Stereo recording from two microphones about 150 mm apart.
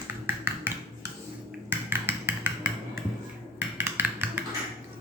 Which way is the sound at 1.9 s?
15° right (ahead or behind).